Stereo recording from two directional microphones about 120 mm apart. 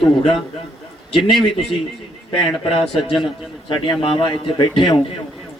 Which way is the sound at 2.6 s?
50° left (ahead or behind).